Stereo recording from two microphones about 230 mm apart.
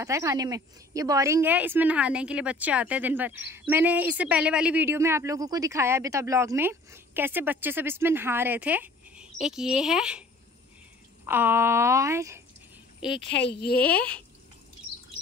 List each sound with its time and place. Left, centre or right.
0.0 s a woman's voice: centre
11.2 s a woman's voice: centre
13.3 s speech: left
13.8 s speech: centre